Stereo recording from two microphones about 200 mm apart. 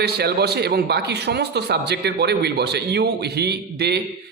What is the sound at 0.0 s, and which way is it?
A man's voice, 55° right (ahead or behind).